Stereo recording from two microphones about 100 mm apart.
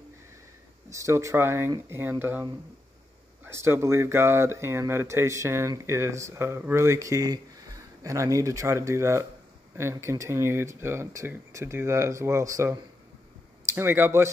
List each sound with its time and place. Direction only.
0.8 s speech: 30° right (ahead or behind)
3.4 s speech: 25° right (ahead or behind)